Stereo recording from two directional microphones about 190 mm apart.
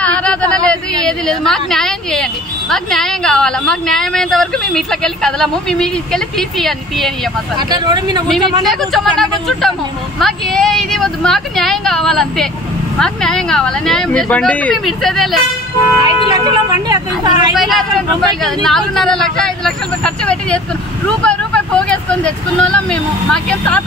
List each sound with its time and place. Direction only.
0.0 s a sound: 5° left (ahead or behind)
2.7 s a woman's voice: centre (ahead or behind)
7.5 s speech: 20° right (ahead or behind)
8.6 s a woman's voice: centre (ahead or behind)
16.0 s speech: 20° right (ahead or behind)
17.6 s a woman's voice: centre (ahead or behind)